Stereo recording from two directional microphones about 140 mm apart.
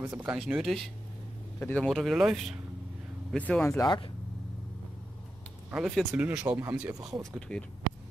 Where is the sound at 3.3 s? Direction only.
10° left (ahead or behind).